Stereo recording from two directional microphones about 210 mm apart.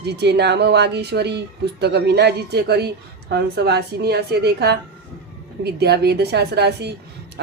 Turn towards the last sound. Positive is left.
turn(degrees=-50)  # may be behind; listen again after turning